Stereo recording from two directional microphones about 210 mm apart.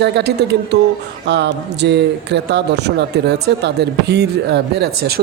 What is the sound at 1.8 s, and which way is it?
Speech, 55° right (ahead or behind).